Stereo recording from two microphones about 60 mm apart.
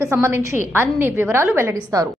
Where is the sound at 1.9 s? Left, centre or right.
Right.